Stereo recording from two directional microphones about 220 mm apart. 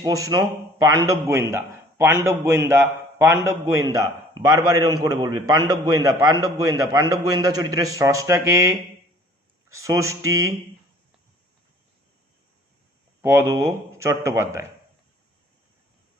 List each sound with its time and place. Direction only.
0.0 s a man's voice: 15° right (ahead or behind)
13.2 s a man's voice: 10° right (ahead or behind)